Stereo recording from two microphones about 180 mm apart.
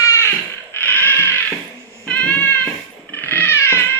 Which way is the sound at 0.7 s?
10° left (ahead or behind).